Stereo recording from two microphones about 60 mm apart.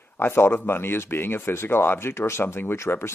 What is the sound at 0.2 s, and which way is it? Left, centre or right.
Speech, left.